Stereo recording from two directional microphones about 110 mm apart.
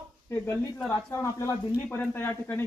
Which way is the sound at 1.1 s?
25° left (ahead or behind).